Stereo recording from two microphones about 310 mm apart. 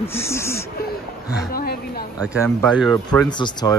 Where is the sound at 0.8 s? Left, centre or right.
Left.